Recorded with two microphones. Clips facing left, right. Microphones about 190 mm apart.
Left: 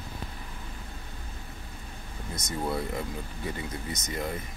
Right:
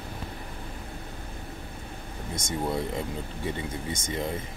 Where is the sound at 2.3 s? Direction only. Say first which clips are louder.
Right 2 dB; 25° right (ahead or behind).